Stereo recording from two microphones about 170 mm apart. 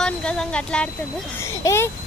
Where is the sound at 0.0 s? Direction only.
5° left (ahead or behind).